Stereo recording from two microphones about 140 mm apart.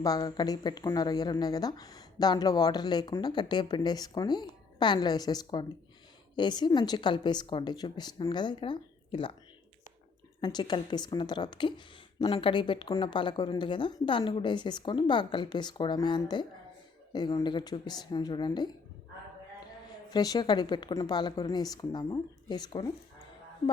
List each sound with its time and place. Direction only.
0.0 s speech: 25° left (ahead or behind)
10.4 s speech: 30° left (ahead or behind)
20.1 s speech: 30° left (ahead or behind)